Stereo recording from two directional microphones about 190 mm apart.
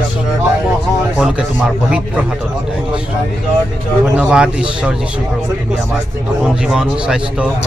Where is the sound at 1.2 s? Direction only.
5° right (ahead or behind).